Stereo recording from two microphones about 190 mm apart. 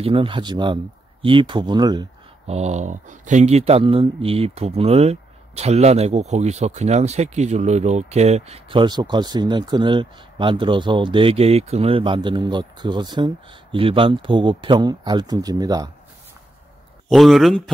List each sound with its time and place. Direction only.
0.0 s speech: 30° right (ahead or behind)
2.4 s speech: 35° right (ahead or behind); by 15.9 s 20° right (ahead or behind)
17.1 s speech: centre (ahead or behind)